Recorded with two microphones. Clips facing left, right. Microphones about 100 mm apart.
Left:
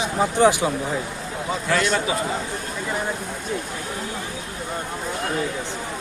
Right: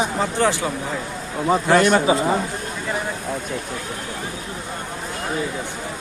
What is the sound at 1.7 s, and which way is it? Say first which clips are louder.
Speech: right 5 dB; 40° right (ahead or behind).